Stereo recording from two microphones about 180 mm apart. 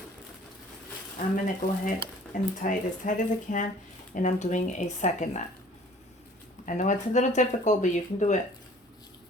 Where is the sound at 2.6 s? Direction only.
45° left (ahead or behind).